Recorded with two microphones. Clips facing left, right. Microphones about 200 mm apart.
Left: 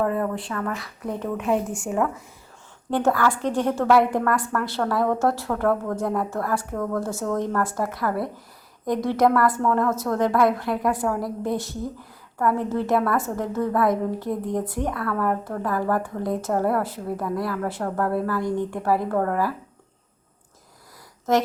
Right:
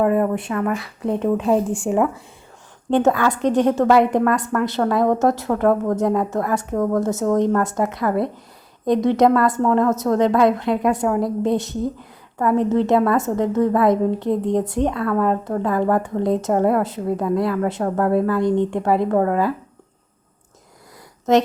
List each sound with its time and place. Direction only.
0.0 s a woman's voice: 20° right (ahead or behind)
1.4 s a woman's voice: 35° right (ahead or behind)